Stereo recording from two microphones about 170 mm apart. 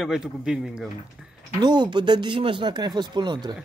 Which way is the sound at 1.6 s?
25° right (ahead or behind).